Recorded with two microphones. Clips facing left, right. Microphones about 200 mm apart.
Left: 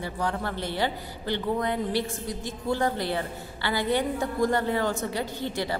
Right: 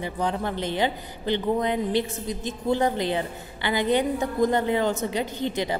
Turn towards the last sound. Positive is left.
turn(degrees=-20)  # may be behind; listen again after turning